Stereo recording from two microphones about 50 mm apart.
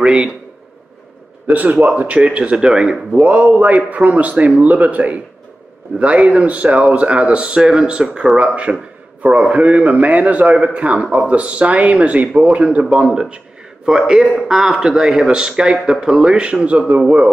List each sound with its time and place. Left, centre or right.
0.0 s a man's voice: centre
1.5 s a man's voice: right; by 8.8 s centre
9.2 s a man's voice: right